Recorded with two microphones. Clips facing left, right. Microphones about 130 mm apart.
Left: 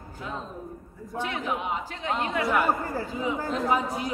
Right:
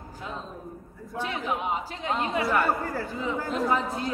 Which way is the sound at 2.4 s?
15° left (ahead or behind).